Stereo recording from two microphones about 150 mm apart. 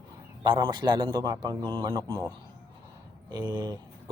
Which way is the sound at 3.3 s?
25° right (ahead or behind).